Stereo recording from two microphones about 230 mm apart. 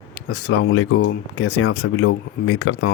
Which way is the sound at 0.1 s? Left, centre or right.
Left.